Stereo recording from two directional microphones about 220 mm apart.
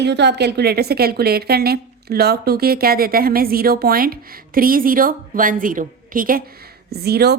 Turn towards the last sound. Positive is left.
turn(degrees=-45)  # may be behind; listen again after turning